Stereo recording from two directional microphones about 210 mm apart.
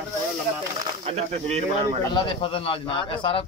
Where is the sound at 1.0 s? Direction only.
30° right (ahead or behind).